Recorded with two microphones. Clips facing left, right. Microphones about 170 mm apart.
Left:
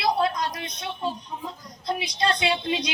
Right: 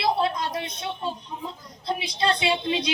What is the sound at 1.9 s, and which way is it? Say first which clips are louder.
A woman's voice: even; 25° right (ahead or behind).